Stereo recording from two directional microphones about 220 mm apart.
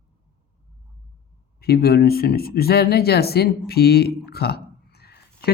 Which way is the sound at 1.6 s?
45° left (ahead or behind).